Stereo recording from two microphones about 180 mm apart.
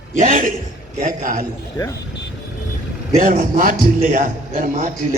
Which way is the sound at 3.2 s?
50° right (ahead or behind).